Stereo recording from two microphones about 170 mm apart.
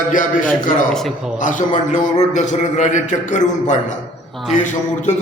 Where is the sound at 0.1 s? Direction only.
50° left (ahead or behind).